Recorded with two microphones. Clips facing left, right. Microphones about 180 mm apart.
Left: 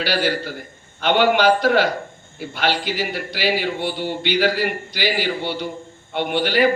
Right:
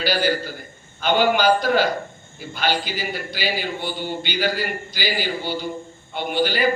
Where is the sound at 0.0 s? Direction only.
70° left (ahead or behind).